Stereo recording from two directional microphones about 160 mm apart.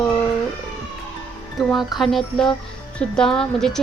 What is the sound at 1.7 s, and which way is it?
A woman's voice, centre (ahead or behind).